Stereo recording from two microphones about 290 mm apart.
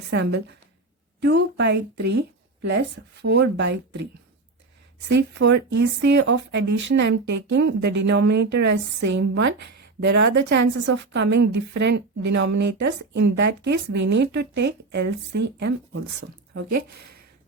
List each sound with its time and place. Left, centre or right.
0.1 s speech: right
16.6 s speech: right